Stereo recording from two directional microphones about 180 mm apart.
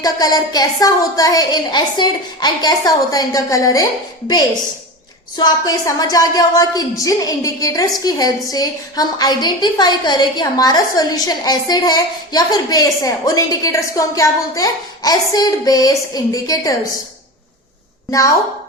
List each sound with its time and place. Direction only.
0.0 s a woman's voice: 20° left (ahead or behind)
5.4 s a woman's voice: 20° left (ahead or behind)